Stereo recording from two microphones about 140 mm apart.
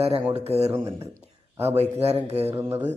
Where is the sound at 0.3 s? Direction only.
50° right (ahead or behind).